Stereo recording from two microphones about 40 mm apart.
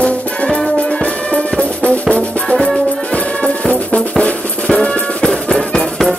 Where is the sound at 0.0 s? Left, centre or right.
Left.